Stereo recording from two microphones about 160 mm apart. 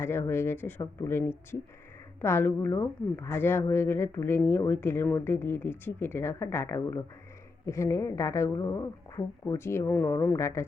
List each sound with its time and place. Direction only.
0.0 s a woman's voice: 15° left (ahead or behind)